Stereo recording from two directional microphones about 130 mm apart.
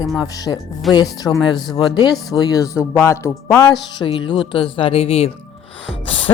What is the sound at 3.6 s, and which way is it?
Speech, 35° left (ahead or behind).